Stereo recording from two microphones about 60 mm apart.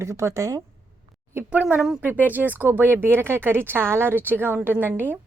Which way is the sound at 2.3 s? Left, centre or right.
Right.